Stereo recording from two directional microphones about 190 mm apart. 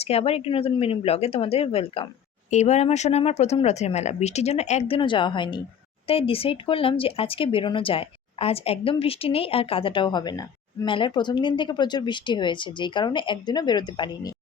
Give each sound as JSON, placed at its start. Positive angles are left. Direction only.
{"t": 0.0, "sound": "speech", "side_deg": 30}